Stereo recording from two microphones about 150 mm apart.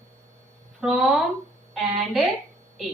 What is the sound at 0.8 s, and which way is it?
Speech, centre (ahead or behind).